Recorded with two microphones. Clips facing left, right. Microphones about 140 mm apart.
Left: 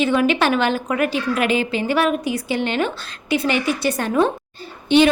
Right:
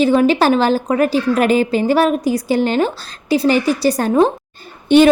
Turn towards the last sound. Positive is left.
turn(degrees=-45)  # may be behind; listen again after turning